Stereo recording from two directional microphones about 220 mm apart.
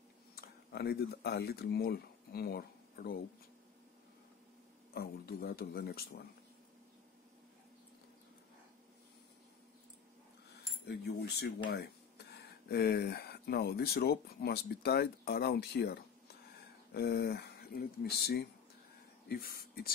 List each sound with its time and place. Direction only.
0.4 s speech: 45° left (ahead or behind)
4.9 s speech: 45° left (ahead or behind)
10.9 s speech: 45° left (ahead or behind)